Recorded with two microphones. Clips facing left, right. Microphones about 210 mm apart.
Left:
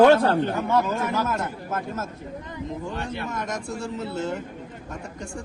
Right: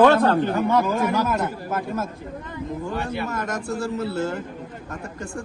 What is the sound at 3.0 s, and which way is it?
Speech, 10° right (ahead or behind).